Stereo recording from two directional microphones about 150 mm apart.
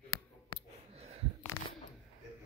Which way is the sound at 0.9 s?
45° right (ahead or behind).